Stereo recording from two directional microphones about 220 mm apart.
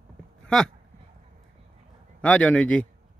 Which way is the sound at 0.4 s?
5° left (ahead or behind).